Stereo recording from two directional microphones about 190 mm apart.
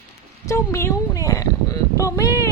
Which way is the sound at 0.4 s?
15° left (ahead or behind).